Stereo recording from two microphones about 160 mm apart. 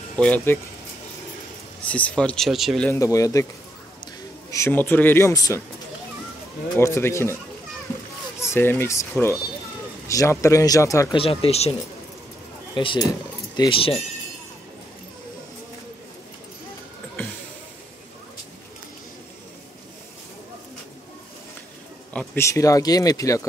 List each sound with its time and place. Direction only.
0.2 s speech: 10° left (ahead or behind)
1.9 s speech: 10° left (ahead or behind)
2.9 s a man's voice: 20° left (ahead or behind)
6.8 s speech: 15° left (ahead or behind)
8.4 s speech: 15° left (ahead or behind)
11.1 s speech: 35° left (ahead or behind)
12.7 s speech: 30° left (ahead or behind)
22.1 s speech: 10° left (ahead or behind)